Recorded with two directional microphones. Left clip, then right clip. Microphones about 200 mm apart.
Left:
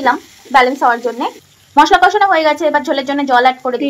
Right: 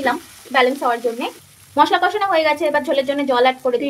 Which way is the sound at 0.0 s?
10° left (ahead or behind).